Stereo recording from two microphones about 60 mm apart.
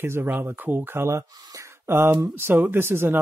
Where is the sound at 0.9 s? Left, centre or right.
Right.